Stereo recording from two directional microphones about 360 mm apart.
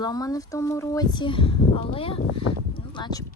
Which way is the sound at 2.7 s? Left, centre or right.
Centre.